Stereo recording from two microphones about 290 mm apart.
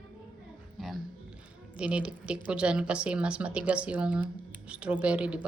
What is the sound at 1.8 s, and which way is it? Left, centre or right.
Speech, centre.